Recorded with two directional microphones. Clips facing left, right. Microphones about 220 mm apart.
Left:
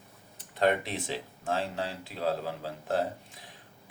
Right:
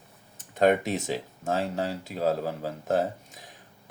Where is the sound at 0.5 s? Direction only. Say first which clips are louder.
Right 5 dB; 45° right (ahead or behind).